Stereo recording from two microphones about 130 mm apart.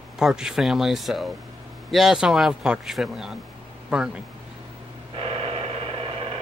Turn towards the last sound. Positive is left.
turn(degrees=-45)  # may be behind; listen again after turning